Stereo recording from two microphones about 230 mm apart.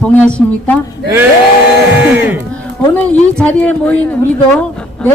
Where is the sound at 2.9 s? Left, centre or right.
Centre.